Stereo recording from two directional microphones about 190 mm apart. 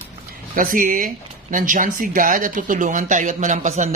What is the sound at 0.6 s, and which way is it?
Speech, 45° right (ahead or behind).